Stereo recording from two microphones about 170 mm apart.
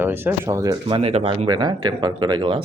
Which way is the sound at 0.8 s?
35° right (ahead or behind).